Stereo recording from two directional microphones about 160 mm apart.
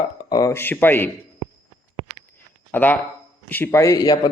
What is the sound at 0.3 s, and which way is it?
Speech, 20° left (ahead or behind).